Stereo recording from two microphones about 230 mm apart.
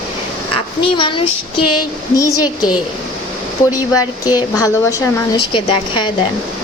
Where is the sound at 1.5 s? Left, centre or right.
Left.